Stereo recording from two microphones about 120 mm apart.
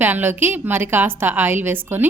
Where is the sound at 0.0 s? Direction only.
15° right (ahead or behind).